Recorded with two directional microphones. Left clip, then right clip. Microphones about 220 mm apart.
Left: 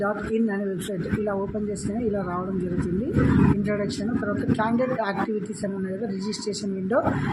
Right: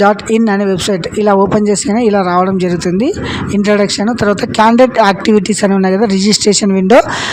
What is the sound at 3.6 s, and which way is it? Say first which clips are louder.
Speech: right 16 dB; 50° right (ahead or behind).